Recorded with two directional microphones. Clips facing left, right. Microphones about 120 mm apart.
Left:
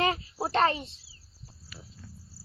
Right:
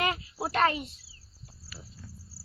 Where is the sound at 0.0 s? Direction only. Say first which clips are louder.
Left 2 dB; 30° left (ahead or behind).